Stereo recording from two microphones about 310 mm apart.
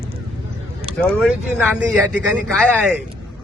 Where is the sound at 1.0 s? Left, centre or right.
Centre.